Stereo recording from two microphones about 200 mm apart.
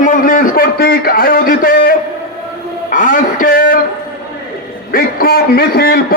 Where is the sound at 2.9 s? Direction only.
40° left (ahead or behind).